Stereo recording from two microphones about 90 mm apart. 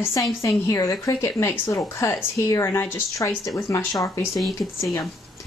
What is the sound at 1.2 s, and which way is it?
Speech, 30° left (ahead or behind).